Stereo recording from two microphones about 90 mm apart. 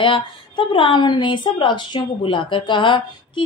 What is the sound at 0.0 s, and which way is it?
Speech, 70° left (ahead or behind).